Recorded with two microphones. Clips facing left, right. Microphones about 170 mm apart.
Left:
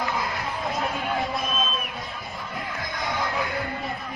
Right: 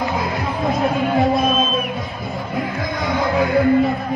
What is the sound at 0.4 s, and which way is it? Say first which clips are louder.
Speech: right 9 dB; 90° right.